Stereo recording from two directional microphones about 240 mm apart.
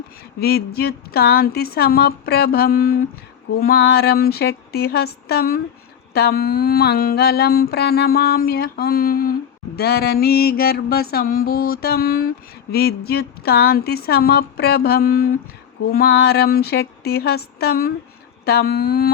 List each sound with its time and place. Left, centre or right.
0.3 s mantra: left